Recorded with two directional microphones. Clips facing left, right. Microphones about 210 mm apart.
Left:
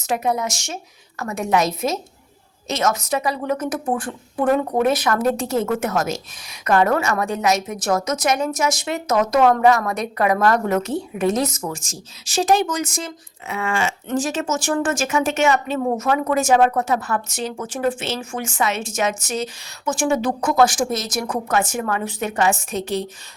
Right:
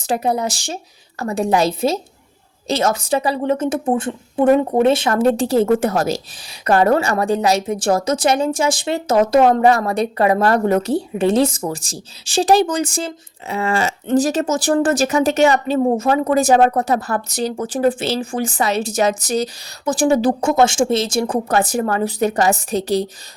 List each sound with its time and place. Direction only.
0.0 s a woman's voice: 30° right (ahead or behind)